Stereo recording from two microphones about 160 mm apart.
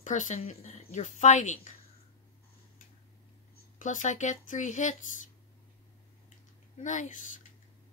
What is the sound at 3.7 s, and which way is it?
Speech, 50° left (ahead or behind).